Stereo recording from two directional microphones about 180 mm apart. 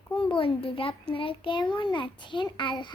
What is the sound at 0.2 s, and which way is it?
A child's voice, 30° left (ahead or behind).